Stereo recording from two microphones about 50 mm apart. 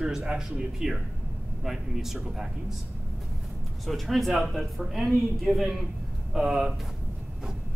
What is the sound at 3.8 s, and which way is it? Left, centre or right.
A man's voice, centre.